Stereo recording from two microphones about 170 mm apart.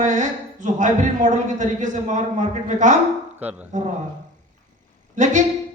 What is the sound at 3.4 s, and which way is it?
Speech, 10° right (ahead or behind).